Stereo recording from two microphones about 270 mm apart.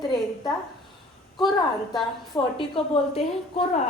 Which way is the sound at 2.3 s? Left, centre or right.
Centre.